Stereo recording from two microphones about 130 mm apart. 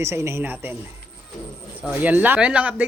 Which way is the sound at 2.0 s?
15° right (ahead or behind).